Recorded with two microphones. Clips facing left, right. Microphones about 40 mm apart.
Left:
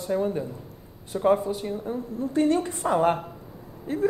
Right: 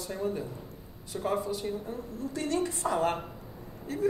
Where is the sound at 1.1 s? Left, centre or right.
Left.